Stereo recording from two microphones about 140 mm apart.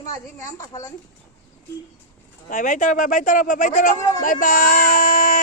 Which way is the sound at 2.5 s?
65° left (ahead or behind).